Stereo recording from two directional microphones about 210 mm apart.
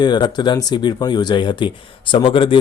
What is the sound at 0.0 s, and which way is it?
Speech, 20° left (ahead or behind).